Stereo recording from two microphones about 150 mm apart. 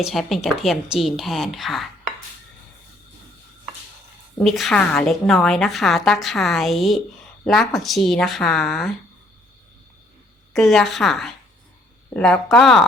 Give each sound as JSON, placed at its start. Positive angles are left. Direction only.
{"t": 0.0, "sound": "a woman's voice", "side_deg": 0}
{"t": 4.4, "sound": "a woman's voice", "side_deg": 0}
{"t": 10.5, "sound": "a woman's voice", "side_deg": 0}